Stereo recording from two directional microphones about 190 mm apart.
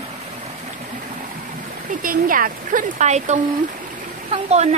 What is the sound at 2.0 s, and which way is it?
Speech, 45° right (ahead or behind).